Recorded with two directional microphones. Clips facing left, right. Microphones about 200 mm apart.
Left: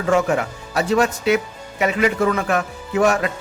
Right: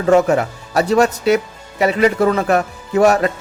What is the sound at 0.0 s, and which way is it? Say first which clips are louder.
A man's voice: right 5 dB; 40° right (ahead or behind).